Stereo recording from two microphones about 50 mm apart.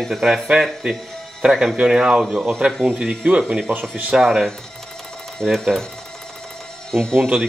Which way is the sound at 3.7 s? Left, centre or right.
Right.